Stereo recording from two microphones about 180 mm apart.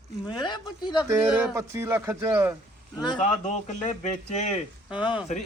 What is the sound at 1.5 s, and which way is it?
Speech, 15° right (ahead or behind).